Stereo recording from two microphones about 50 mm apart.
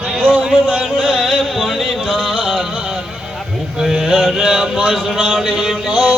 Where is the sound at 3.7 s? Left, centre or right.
Centre.